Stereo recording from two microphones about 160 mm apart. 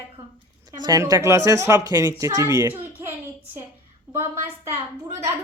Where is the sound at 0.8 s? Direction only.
25° right (ahead or behind).